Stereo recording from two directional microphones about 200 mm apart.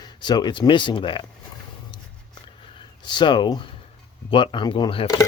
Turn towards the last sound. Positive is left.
turn(degrees=25)  # may be behind; listen again after turning